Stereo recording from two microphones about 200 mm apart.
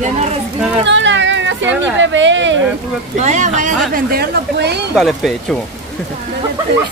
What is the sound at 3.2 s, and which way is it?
Speech, 35° right (ahead or behind).